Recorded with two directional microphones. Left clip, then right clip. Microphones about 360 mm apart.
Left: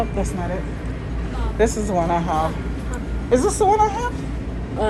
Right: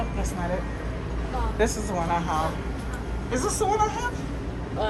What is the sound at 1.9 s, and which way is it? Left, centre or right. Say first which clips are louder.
Speech: left 6 dB; centre.